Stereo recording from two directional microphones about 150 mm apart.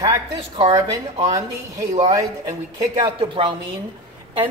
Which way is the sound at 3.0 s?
35° right (ahead or behind).